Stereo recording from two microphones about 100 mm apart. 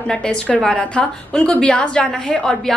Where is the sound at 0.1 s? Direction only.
10° left (ahead or behind).